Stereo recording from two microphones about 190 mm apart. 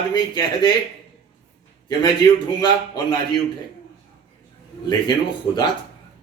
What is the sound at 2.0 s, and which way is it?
A man's voice, 20° left (ahead or behind).